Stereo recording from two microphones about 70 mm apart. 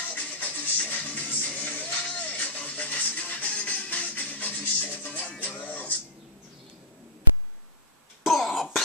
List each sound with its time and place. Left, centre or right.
0.1 s music: left
8.3 s cough: centre